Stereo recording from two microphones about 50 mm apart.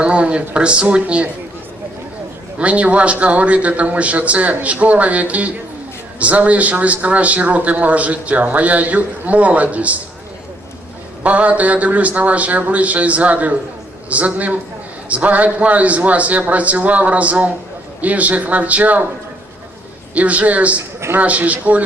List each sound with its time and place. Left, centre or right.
0.0 s a man's voice: right
2.6 s a man's voice: right
11.2 s a man's voice: right
20.1 s a man's voice: right